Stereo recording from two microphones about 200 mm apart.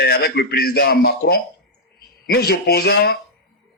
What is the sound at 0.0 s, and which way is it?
A man's voice, 55° left (ahead or behind).